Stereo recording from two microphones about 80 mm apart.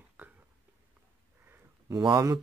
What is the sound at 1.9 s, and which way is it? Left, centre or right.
Speech, right.